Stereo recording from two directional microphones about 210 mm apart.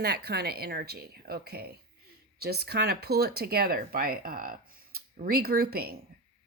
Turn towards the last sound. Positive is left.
turn(degrees=-45)  # may be behind; listen again after turning